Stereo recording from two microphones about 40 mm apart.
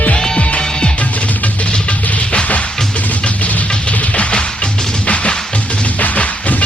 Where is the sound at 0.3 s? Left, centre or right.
Left.